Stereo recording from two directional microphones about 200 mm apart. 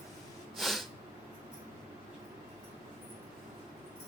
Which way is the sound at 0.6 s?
Centre (ahead or behind).